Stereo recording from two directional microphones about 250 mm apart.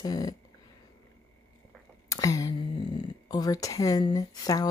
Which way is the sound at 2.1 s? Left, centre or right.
Centre.